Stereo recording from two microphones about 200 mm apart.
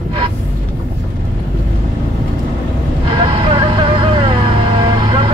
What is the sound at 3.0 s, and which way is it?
Vehicle, 25° right (ahead or behind).